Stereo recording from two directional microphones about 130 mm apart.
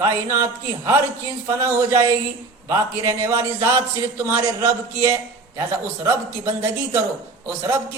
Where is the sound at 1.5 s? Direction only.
20° right (ahead or behind).